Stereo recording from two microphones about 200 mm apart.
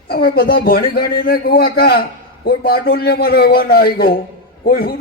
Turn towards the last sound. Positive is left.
turn(degrees=50)  # may be behind; listen again after turning